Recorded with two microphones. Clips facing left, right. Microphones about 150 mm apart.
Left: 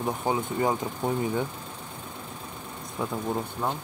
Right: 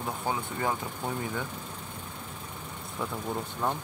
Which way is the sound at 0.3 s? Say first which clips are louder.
Left 5 dB; 20° left (ahead or behind).